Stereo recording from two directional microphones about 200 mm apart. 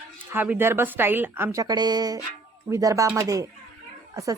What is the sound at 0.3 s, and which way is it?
Speech, 10° right (ahead or behind).